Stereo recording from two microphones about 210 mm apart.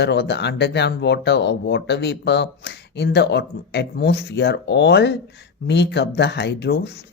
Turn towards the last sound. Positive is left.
turn(degrees=50)  # may be behind; listen again after turning